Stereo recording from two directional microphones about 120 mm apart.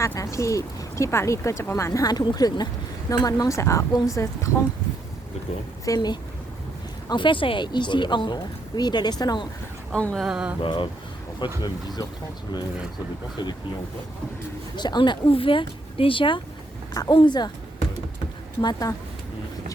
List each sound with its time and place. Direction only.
0.0 s speech: 25° left (ahead or behind)
5.8 s speech: 30° left (ahead or behind)
7.1 s speech: 45° left (ahead or behind)
9.9 s speech: 10° left (ahead or behind)
10.2 s mantra: 5° right (ahead or behind)
10.6 s speech: 40° left (ahead or behind)
13.4 s speech: 40° left (ahead or behind)
14.8 s speech: 40° left (ahead or behind)
16.9 s speech: 35° left (ahead or behind)
18.6 s speech: 35° left (ahead or behind)